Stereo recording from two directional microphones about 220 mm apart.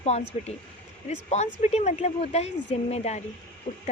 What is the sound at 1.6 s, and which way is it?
Speech, 30° left (ahead or behind).